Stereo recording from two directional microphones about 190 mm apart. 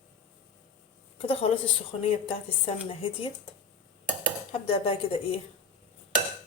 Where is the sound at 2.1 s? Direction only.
30° left (ahead or behind).